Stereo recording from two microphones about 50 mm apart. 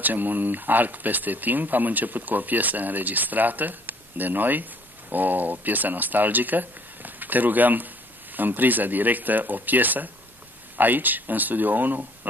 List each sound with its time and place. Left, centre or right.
0.0 s speech: right